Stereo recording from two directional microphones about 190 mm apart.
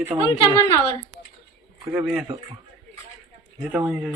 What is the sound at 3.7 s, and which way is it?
Speech, 5° right (ahead or behind).